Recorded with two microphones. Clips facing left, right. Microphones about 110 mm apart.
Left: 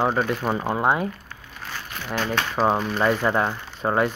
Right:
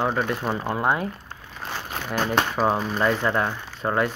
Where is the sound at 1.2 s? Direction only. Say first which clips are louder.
Right 3 dB; 30° right (ahead or behind).